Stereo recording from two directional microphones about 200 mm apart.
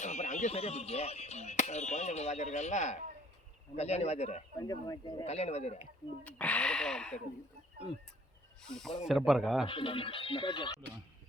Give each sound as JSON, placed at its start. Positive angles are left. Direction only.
{"t": 0.0, "sound": "speech", "side_deg": 35}
{"t": 4.6, "sound": "speech", "side_deg": 20}
{"t": 5.2, "sound": "speech", "side_deg": 30}
{"t": 6.2, "sound": "speech", "side_deg": 5}
{"t": 8.6, "sound": "speech", "side_deg": 0}
{"t": 9.6, "sound": "speech", "side_deg": 25}